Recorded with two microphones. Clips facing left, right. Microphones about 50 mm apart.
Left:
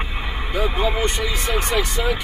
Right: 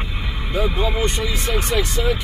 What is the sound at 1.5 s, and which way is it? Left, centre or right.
Vehicle, centre.